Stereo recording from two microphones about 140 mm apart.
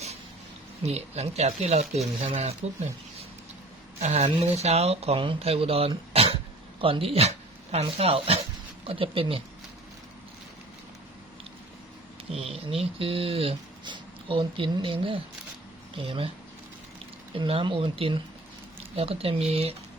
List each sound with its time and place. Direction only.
0.8 s speech: 50° right (ahead or behind)
4.0 s speech: 50° right (ahead or behind)
6.1 s cough: 45° right (ahead or behind)
6.8 s speech: 40° right (ahead or behind)
12.3 s speech: 45° right (ahead or behind)
17.3 s speech: 40° right (ahead or behind)